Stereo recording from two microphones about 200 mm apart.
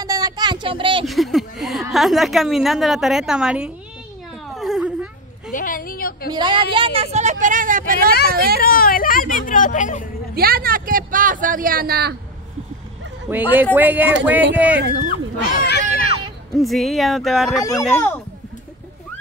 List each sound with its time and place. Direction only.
0.0 s a sound: 20° right (ahead or behind)
1.0 s a woman's voice: centre (ahead or behind)
4.6 s a sound: centre (ahead or behind)
5.5 s a sound: 45° left (ahead or behind)
6.3 s vehicle: 25° right (ahead or behind); by 8.5 s 50° right (ahead or behind)
8.5 s vehicle: 45° left (ahead or behind)
10.3 s speech: 50° right (ahead or behind)
13.3 s speech: 10° right (ahead or behind)
15.4 s run: 50° left (ahead or behind)
16.5 s speech: centre (ahead or behind)